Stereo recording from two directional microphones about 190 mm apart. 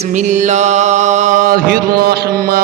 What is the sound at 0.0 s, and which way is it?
Mantra, 40° right (ahead or behind).